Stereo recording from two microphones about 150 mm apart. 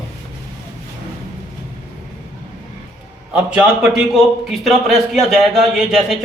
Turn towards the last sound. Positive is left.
turn(degrees=-5)  # may be behind; listen again after turning